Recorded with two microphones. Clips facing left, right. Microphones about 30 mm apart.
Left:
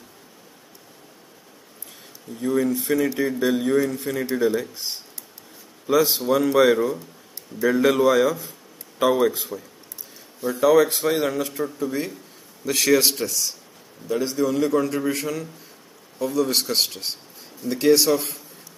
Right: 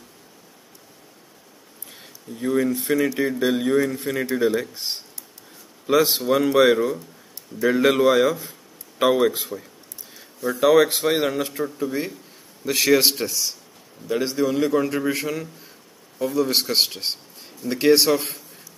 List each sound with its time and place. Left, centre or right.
2.4 s speech: centre
4.6 s speech: right
9.5 s speech: centre
10.5 s speech: right
11.8 s speech: centre